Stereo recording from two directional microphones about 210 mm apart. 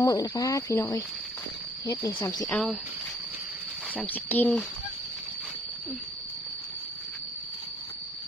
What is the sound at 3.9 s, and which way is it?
Speech, 10° left (ahead or behind).